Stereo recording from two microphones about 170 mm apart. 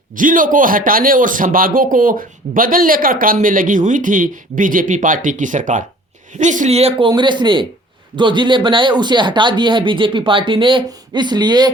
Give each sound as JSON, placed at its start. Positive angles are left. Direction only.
{"t": 0.2, "sound": "speech", "side_deg": -50}